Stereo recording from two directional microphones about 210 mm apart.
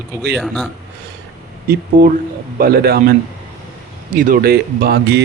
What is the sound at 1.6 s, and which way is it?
Speech, 45° right (ahead or behind).